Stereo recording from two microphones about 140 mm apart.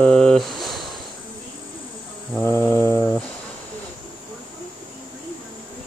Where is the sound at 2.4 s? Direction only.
15° left (ahead or behind).